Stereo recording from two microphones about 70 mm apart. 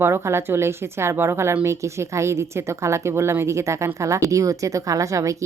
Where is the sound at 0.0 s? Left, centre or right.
Right.